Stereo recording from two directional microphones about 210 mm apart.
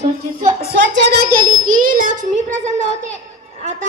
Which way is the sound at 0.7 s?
60° right (ahead or behind).